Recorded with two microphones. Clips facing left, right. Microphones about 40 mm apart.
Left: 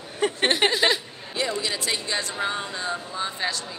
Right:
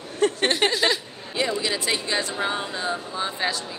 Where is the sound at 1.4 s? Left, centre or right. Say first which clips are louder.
Right 2 dB; centre.